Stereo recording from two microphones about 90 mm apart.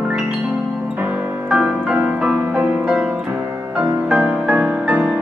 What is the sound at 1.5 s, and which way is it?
Music, 10° right (ahead or behind).